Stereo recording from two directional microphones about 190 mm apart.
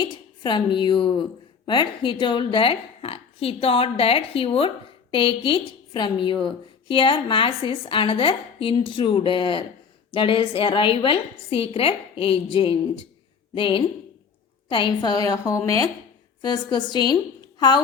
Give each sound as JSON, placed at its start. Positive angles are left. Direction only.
{"t": 0.0, "sound": "a woman's voice", "side_deg": 25}